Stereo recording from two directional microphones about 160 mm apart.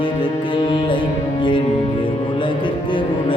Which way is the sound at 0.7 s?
30° left (ahead or behind).